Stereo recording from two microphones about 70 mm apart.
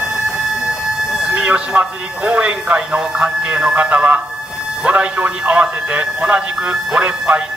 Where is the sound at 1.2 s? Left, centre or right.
Centre.